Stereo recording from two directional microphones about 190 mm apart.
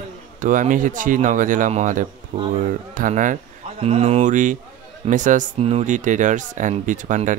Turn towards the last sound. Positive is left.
turn(degrees=-40)  # may be behind; listen again after turning